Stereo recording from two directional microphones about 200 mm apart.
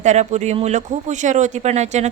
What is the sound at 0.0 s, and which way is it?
Speech, 35° right (ahead or behind).